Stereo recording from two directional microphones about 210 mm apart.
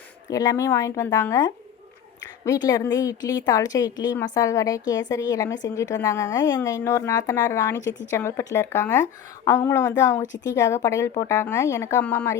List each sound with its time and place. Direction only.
0.3 s a woman's voice: 15° left (ahead or behind)